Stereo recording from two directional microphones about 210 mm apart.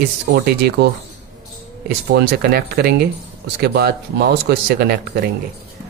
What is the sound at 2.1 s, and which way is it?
Speech, 50° right (ahead or behind).